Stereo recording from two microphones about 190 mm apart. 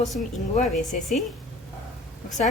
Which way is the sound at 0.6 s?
Centre (ahead or behind).